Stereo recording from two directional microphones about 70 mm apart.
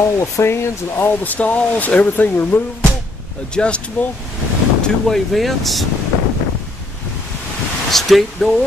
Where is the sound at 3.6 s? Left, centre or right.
Centre.